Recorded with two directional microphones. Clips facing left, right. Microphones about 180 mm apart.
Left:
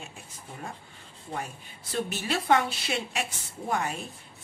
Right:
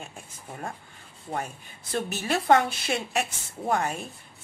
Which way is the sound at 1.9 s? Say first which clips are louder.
Right 2 dB; 45° right (ahead or behind).